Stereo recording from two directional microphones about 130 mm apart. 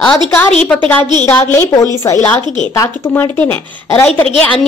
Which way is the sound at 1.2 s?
15° left (ahead or behind).